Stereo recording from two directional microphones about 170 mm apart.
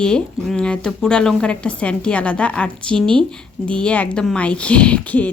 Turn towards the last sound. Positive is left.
turn(degrees=10)  # may be behind; listen again after turning